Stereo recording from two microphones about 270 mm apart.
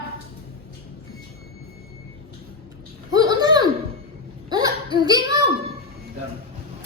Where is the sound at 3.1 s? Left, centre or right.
Centre.